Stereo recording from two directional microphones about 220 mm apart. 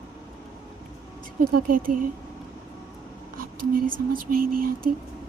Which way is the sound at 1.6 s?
40° right (ahead or behind).